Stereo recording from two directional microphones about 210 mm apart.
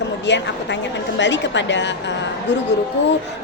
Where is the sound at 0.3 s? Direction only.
55° left (ahead or behind).